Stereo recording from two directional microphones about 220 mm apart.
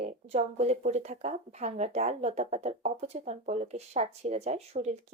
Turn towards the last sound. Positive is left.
turn(degrees=-30)  # may be behind; listen again after turning